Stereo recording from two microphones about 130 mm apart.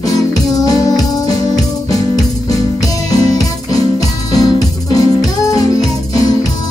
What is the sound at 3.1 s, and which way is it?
Music, 30° left (ahead or behind).